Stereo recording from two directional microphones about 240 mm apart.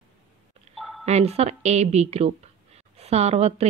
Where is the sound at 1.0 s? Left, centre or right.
Right.